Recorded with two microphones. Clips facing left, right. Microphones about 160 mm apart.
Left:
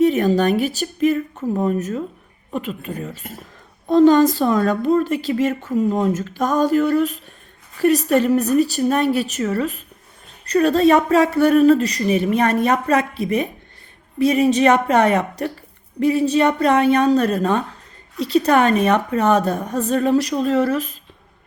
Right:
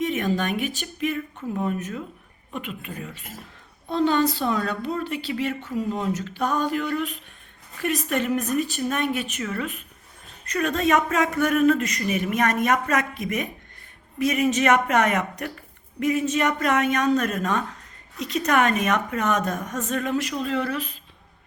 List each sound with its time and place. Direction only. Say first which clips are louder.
0.0 s a woman's voice: left 9 dB; 40° left (ahead or behind)